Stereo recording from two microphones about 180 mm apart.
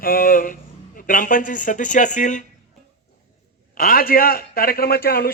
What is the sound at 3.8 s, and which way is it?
A man's voice, 55° left (ahead or behind).